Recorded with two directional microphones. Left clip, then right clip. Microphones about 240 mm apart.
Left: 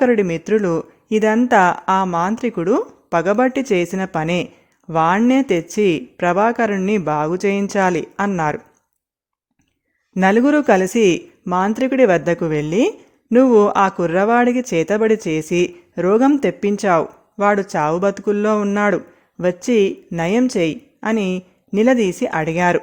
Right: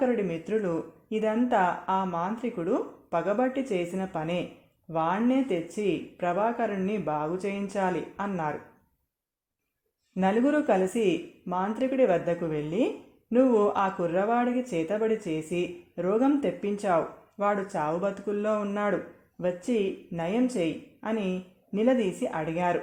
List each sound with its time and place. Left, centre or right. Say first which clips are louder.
0.0 s speech: left 11 dB; left
10.2 s speech: left 10 dB; left